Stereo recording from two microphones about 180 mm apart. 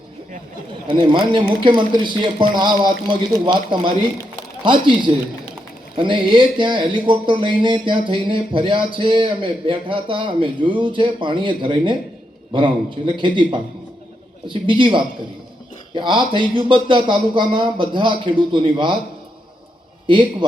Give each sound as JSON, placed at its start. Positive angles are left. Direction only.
{"t": 0.9, "sound": "speech", "side_deg": -30}
{"t": 20.1, "sound": "speech", "side_deg": -25}